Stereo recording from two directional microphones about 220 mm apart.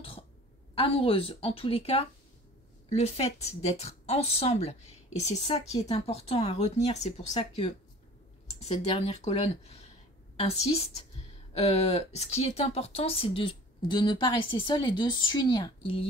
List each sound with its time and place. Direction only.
0.7 s a woman's voice: 25° left (ahead or behind)